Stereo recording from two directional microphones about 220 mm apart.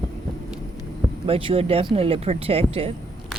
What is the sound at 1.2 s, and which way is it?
Speech, 25° right (ahead or behind).